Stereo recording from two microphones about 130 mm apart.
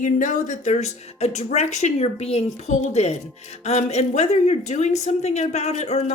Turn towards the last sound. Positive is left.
turn(degrees=55)  # may be behind; listen again after turning